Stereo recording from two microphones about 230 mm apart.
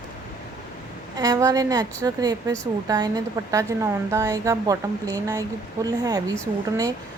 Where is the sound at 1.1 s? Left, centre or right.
Centre.